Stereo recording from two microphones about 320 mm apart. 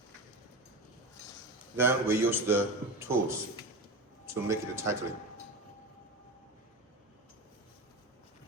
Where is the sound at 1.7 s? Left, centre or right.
Centre.